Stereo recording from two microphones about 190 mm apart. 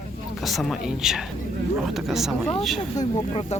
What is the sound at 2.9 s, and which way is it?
Speech, 35° left (ahead or behind).